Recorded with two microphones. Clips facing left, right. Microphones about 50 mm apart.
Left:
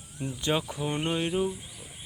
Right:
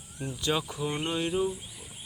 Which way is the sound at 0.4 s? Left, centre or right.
Left.